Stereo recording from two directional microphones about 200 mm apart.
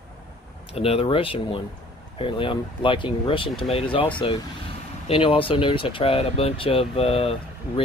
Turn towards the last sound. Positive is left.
turn(degrees=30)  # may be behind; listen again after turning